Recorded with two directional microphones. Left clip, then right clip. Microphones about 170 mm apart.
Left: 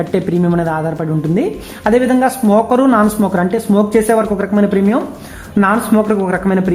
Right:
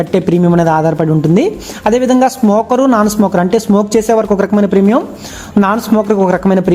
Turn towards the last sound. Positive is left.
turn(degrees=-30)  # may be behind; listen again after turning